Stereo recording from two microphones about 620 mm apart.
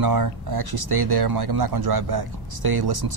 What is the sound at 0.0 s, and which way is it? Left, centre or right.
Speech, right.